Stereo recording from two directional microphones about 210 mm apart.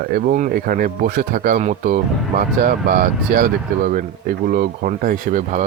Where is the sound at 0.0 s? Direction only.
45° right (ahead or behind).